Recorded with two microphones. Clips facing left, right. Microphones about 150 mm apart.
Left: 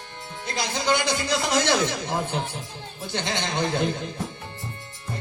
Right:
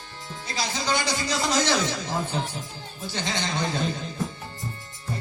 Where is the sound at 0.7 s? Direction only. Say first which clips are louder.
Left 4 dB; 55° left (ahead or behind).